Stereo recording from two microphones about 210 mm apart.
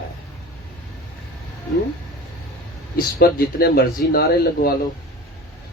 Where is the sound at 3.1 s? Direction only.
45° left (ahead or behind).